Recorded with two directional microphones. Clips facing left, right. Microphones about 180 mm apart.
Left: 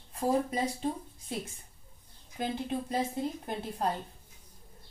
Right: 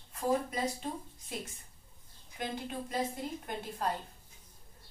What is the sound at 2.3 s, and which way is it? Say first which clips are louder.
A woman's voice: left 5 dB; 30° left (ahead or behind).